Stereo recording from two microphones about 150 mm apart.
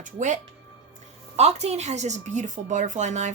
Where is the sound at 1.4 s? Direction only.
45° right (ahead or behind).